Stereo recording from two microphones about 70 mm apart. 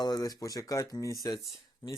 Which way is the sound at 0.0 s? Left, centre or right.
Left.